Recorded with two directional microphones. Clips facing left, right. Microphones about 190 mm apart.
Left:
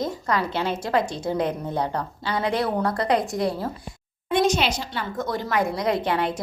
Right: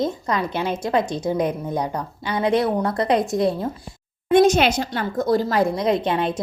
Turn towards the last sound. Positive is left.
turn(degrees=-20)  # may be behind; listen again after turning